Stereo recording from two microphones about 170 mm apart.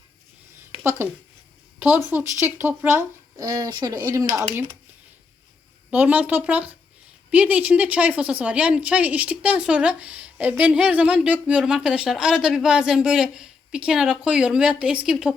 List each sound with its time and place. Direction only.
1.8 s a woman's voice: 10° right (ahead or behind)
5.9 s a woman's voice: 10° right (ahead or behind)